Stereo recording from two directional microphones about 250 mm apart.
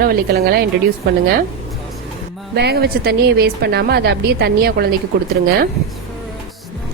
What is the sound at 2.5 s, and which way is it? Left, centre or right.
A woman's voice, right.